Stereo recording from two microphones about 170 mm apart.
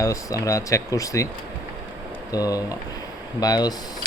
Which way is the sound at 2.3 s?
20° left (ahead or behind).